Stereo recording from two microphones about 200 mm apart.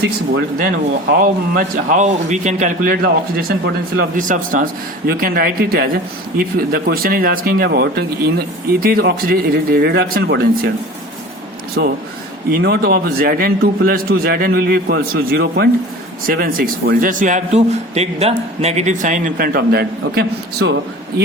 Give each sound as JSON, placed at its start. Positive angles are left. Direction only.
{"t": 1.2, "sound": "speech", "side_deg": -45}
{"t": 11.8, "sound": "a man's voice", "side_deg": -55}